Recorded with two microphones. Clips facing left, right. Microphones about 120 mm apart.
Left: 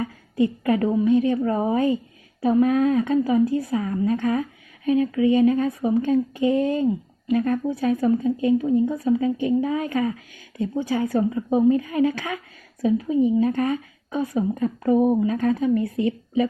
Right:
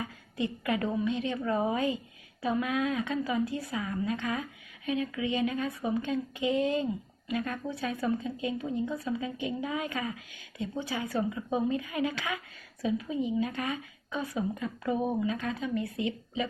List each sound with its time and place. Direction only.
0.4 s speech: 35° left (ahead or behind)